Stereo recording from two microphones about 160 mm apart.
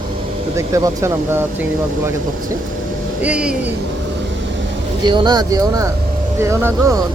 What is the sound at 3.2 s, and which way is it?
Speech, 5° right (ahead or behind).